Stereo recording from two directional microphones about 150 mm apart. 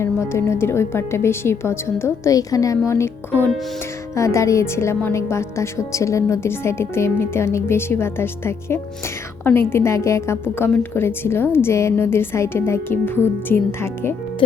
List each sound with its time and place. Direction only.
0.0 s speech: 20° left (ahead or behind)
4.1 s a woman's voice: 20° left (ahead or behind)